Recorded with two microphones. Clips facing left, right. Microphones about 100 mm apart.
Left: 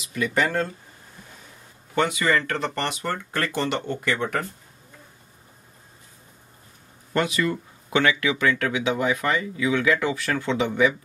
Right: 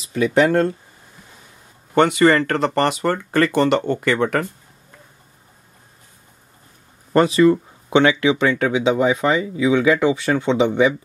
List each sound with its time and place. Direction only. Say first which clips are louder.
0.0 s a sound: right 7 dB; 30° right (ahead or behind)
2.0 s speech: right 8 dB; 60° right (ahead or behind)
7.2 s speech: right 10 dB; 30° right (ahead or behind)